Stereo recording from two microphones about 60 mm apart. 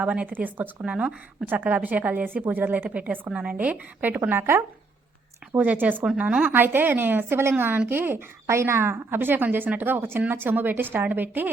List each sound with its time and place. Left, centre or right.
0.0 s a woman's voice: right
0.9 s a woman's voice: centre; by 4.6 s right
5.5 s a woman's voice: right